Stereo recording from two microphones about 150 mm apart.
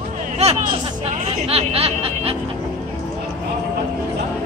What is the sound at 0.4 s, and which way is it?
Music, 45° right (ahead or behind).